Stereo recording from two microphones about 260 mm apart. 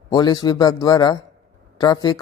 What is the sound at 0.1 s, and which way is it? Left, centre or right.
Speech, centre.